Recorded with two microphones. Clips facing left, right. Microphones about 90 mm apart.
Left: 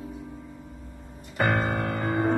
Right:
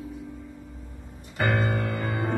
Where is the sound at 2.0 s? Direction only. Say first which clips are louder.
Left 4 dB; 30° left (ahead or behind).